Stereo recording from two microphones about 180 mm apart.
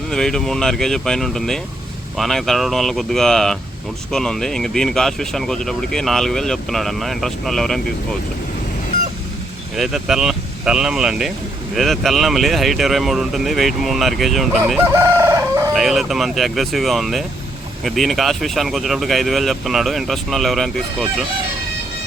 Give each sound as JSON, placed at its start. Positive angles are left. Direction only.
{"t": 0.1, "sound": "speech", "side_deg": 5}
{"t": 9.7, "sound": "speech", "side_deg": 0}
{"t": 14.9, "sound": "chicken", "side_deg": -15}
{"t": 15.7, "sound": "speech", "side_deg": 0}